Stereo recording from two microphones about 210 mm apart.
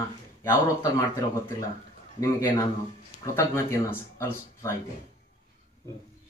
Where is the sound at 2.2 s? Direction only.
15° left (ahead or behind).